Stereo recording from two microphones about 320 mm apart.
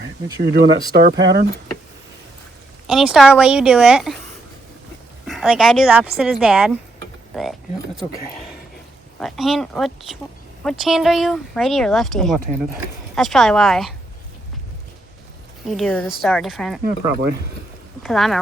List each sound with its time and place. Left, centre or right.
0.3 s speech: right
2.8 s speech: centre
5.2 s speech: centre
9.1 s speech: centre
15.6 s speech: centre
18.0 s speech: centre